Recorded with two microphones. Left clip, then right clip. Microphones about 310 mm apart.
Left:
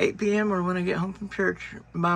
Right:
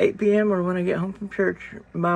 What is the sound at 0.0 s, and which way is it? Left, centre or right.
A man's voice, centre.